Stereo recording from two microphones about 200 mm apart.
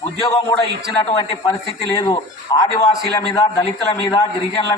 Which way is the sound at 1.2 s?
20° left (ahead or behind).